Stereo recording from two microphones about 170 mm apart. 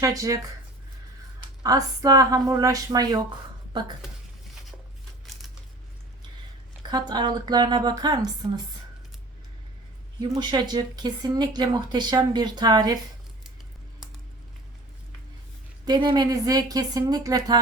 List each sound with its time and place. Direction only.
0.0 s speech: 20° right (ahead or behind)
1.6 s a woman's voice: 20° right (ahead or behind)
7.1 s speech: 25° right (ahead or behind)
10.2 s speech: 25° right (ahead or behind)
15.9 s speech: 25° right (ahead or behind)